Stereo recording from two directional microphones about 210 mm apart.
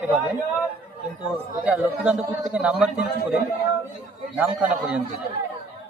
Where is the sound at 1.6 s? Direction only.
5° right (ahead or behind).